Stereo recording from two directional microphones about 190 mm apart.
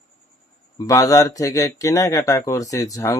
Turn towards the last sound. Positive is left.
turn(degrees=15)  # may be behind; listen again after turning